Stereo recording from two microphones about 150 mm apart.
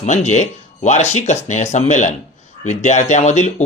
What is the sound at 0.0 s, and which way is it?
Speech, 50° left (ahead or behind).